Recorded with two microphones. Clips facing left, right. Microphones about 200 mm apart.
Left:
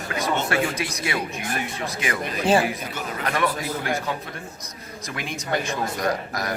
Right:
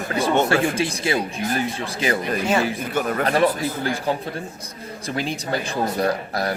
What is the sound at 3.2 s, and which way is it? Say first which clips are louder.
A man's voice: right 4 dB; 30° right (ahead or behind).